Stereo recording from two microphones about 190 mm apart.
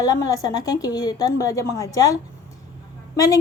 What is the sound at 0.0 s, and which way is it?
A woman's voice, 20° left (ahead or behind).